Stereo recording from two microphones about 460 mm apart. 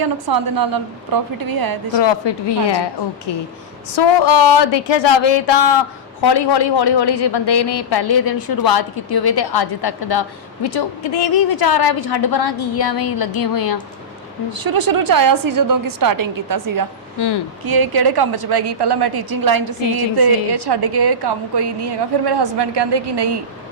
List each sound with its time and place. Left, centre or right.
0.0 s a woman's voice: right
2.0 s a woman's voice: left
6.2 s a woman's voice: left
14.5 s a woman's voice: right
17.2 s a woman's voice: left
17.7 s a woman's voice: right